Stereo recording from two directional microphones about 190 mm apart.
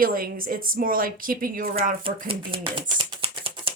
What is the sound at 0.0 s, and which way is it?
Speech, 50° right (ahead or behind).